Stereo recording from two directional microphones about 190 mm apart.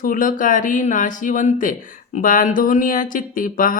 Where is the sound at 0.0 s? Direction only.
45° left (ahead or behind).